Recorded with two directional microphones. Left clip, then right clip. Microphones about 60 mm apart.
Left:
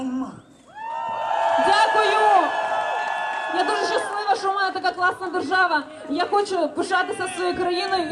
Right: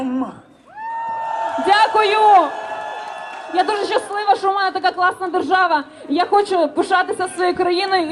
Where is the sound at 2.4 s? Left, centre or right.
Left.